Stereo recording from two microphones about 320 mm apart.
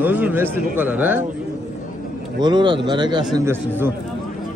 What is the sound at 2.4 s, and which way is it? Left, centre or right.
Speech, centre.